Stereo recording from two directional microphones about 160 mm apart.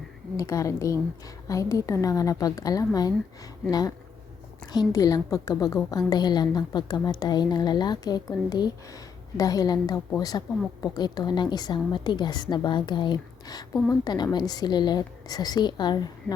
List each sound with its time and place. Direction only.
0.3 s a woman's voice: 20° left (ahead or behind)